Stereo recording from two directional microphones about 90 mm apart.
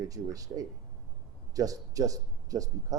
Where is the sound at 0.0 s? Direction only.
40° right (ahead or behind).